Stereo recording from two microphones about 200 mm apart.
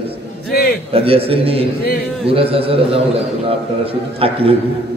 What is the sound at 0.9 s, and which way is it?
A man's voice, 30° right (ahead or behind).